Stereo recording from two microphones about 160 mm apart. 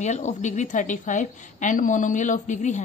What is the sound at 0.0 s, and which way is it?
A woman's voice, 45° left (ahead or behind).